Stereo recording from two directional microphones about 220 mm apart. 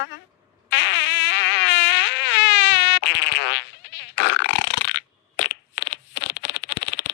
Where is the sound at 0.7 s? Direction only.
55° left (ahead or behind).